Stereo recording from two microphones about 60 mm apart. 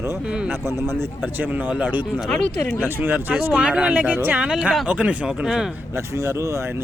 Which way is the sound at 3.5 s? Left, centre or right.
Centre.